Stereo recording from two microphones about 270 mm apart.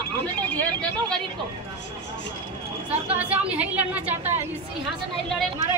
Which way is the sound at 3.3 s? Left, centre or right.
Centre.